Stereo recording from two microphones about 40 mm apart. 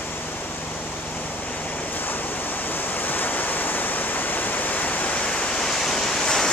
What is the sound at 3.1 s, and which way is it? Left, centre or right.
Waterfall, left.